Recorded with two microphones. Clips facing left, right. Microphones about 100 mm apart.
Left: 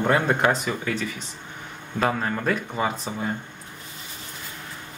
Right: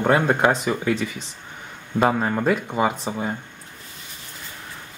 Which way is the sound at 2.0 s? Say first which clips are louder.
Right 4 dB; 15° right (ahead or behind).